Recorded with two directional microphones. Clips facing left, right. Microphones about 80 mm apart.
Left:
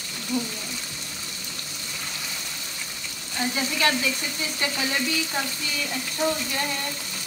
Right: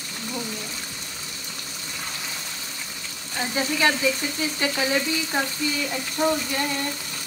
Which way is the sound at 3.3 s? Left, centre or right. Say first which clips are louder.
Right 2 dB; centre.